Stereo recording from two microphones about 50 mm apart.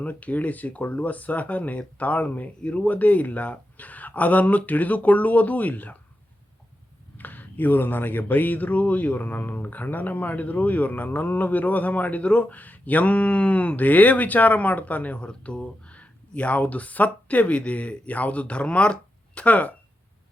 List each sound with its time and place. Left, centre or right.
0.0 s speech: left
2.6 s speech: left
2.8 s speech: left
7.2 s speech: left